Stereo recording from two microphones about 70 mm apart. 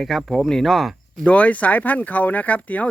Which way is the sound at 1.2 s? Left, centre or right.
Centre.